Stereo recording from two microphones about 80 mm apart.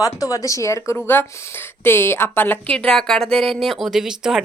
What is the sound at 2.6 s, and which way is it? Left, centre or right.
Speech, centre.